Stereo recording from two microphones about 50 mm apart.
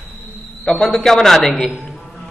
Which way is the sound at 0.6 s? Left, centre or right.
Centre.